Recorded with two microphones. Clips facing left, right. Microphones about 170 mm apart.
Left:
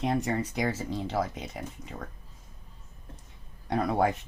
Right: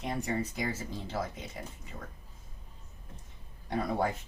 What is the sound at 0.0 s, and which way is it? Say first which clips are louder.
Speech: left 5 dB; 75° left (ahead or behind).